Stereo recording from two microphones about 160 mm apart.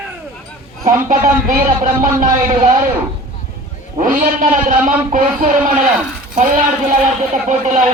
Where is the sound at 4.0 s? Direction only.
60° right (ahead or behind).